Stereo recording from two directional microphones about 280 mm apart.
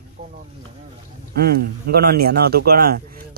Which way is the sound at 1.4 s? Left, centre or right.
Right.